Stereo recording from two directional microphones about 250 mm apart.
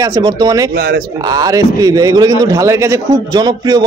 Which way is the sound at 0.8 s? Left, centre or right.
Right.